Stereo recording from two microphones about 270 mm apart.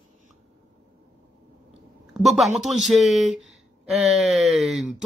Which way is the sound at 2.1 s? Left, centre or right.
Centre.